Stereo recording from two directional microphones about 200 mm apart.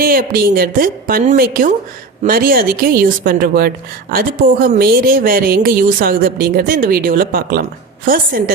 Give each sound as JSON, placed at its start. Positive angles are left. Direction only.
{"t": 0.0, "sound": "speech", "side_deg": -45}